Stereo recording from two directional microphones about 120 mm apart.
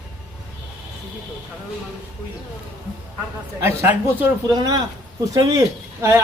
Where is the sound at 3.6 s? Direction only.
20° right (ahead or behind).